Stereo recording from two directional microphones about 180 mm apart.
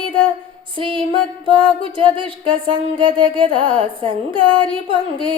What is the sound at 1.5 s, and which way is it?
Music, 30° right (ahead or behind).